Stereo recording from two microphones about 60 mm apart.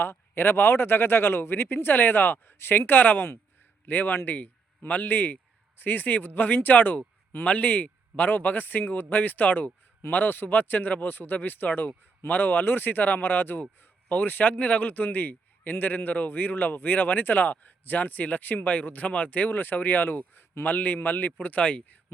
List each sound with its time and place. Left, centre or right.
0.0 s a man's voice: left